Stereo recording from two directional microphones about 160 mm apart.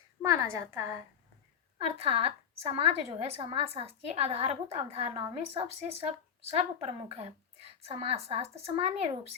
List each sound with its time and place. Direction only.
0.2 s a woman's voice: 15° right (ahead or behind)
2.0 s a woman's voice: 35° right (ahead or behind)